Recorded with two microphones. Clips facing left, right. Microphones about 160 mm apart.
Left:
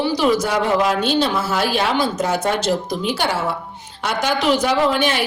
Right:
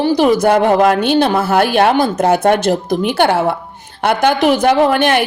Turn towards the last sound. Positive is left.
turn(degrees=-55)  # may be behind; listen again after turning